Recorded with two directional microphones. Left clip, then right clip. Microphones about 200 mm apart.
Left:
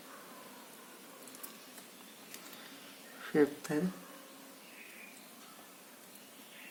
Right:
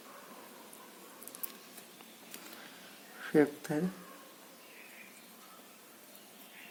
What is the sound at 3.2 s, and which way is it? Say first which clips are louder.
Speech: right 2 dB; 25° right (ahead or behind).